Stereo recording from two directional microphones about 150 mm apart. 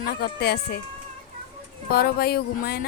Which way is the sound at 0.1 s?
90° left.